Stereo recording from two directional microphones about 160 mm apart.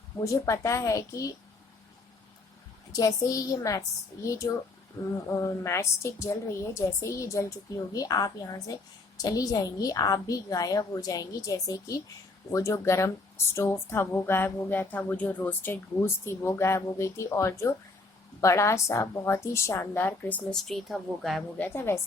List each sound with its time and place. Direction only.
0.3 s a woman's voice: 20° left (ahead or behind)
2.9 s a woman's voice: 20° left (ahead or behind); by 21.7 s centre (ahead or behind)
21.8 s speech: 15° left (ahead or behind)